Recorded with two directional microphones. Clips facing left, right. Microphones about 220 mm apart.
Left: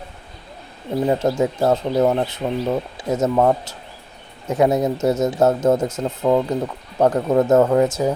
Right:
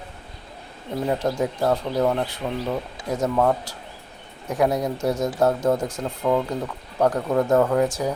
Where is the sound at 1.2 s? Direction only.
25° left (ahead or behind).